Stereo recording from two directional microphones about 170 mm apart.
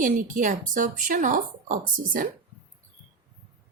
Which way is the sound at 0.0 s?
50° right (ahead or behind).